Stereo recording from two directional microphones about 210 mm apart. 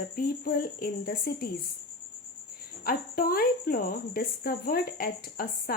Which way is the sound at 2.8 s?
45° left (ahead or behind).